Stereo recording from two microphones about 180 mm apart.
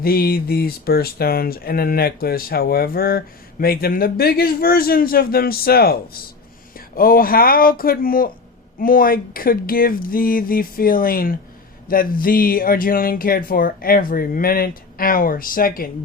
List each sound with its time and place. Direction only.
0.0 s speech: 55° left (ahead or behind)